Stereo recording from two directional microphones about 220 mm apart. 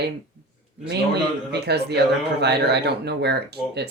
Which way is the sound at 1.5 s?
50° right (ahead or behind).